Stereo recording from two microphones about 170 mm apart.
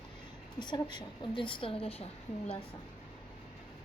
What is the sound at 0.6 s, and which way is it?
A woman's voice, 25° left (ahead or behind).